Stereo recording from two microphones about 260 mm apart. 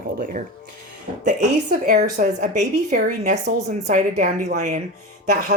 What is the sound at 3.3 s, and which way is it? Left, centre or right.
Speech, right.